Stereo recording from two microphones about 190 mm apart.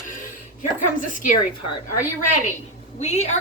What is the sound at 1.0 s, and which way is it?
Speech, 45° left (ahead or behind).